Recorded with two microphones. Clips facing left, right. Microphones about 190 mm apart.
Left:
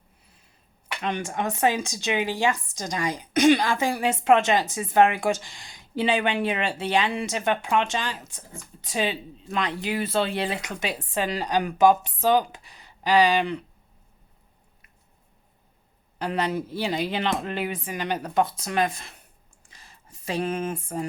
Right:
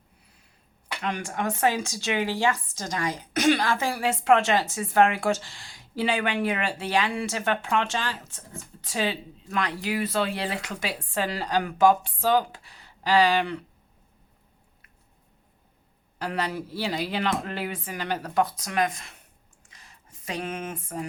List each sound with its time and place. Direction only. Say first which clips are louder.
1.0 s speech: left 1 dB; 25° left (ahead or behind)
16.1 s speech: left 3 dB; 20° left (ahead or behind)
19.7 s a sound: left 2 dB; 30° left (ahead or behind)